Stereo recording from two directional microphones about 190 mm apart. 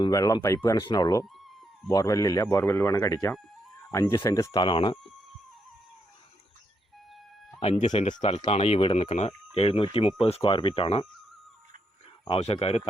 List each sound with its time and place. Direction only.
0.0 s speech: 20° left (ahead or behind)
7.6 s speech: 35° left (ahead or behind)
12.3 s speech: 35° left (ahead or behind)